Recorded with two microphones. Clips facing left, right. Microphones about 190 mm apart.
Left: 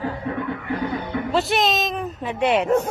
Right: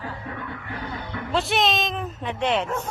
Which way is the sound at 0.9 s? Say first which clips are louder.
Left 7 dB; 50° left (ahead or behind).